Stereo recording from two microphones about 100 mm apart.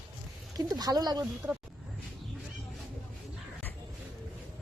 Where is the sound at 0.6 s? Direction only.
40° right (ahead or behind).